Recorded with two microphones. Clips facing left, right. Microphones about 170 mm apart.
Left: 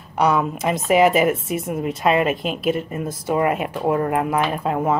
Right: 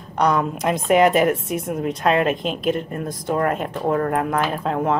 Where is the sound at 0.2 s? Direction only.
5° left (ahead or behind).